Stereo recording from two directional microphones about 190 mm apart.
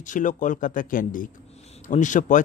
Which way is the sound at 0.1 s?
40° left (ahead or behind).